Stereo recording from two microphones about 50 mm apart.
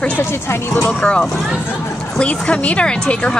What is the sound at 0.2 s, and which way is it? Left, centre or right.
Speech, left.